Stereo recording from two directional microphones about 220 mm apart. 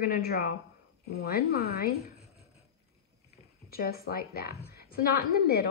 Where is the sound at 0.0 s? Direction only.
45° left (ahead or behind).